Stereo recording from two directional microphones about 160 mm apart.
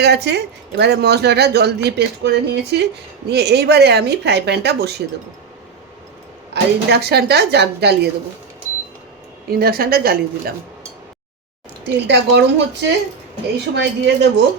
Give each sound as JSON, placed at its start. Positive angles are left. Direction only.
{"t": 0.0, "sound": "speech", "side_deg": -90}
{"t": 6.5, "sound": "speech", "side_deg": -90}
{"t": 9.5, "sound": "a woman's voice", "side_deg": -70}
{"t": 11.9, "sound": "speech", "side_deg": -90}